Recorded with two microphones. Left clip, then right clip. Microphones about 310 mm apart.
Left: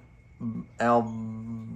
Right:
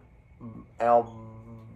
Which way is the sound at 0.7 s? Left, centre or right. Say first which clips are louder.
Right 2 dB; left.